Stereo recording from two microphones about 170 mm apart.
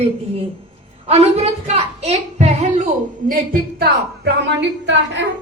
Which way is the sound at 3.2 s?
55° right (ahead or behind).